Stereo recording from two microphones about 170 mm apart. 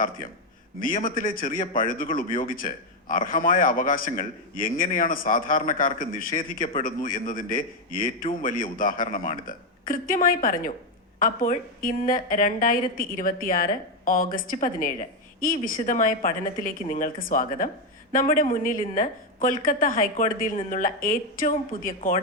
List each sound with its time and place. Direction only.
0.8 s a woman's voice: 55° left (ahead or behind)